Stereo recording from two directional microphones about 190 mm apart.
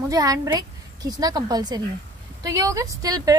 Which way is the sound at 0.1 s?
20° right (ahead or behind).